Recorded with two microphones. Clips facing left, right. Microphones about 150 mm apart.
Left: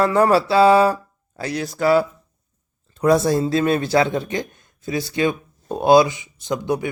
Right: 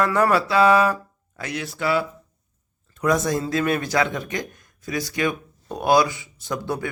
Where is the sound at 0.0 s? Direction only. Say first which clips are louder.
Left 4 dB; 30° left (ahead or behind).